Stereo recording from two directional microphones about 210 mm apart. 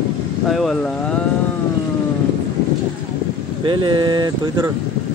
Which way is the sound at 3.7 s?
20° right (ahead or behind).